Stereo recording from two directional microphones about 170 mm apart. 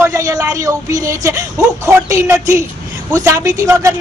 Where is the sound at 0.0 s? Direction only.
20° right (ahead or behind).